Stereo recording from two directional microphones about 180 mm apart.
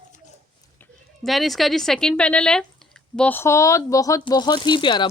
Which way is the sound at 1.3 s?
Centre (ahead or behind).